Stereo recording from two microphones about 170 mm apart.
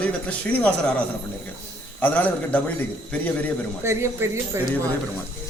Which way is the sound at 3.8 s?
15° right (ahead or behind).